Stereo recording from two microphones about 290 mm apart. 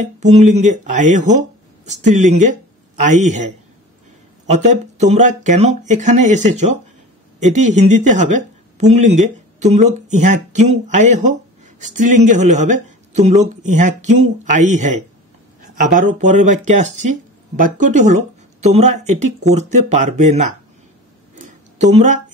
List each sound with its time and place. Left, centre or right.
0.0 s speech: right
4.6 s speech: right
15.9 s speech: right
21.4 s a sound: right